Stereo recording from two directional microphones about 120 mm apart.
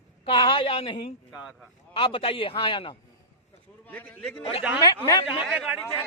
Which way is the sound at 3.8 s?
15° left (ahead or behind).